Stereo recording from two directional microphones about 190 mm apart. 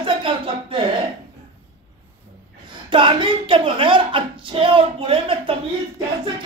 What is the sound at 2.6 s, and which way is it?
Speech, 25° right (ahead or behind).